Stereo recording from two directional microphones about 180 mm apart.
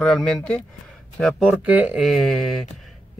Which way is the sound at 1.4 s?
10° right (ahead or behind).